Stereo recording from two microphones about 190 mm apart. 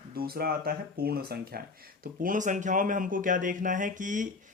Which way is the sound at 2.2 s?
45° right (ahead or behind).